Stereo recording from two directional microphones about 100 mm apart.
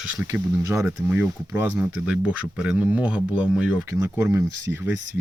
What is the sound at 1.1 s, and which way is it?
Speech, 15° right (ahead or behind).